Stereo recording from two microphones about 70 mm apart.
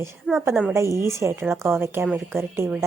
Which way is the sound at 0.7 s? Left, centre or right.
Right.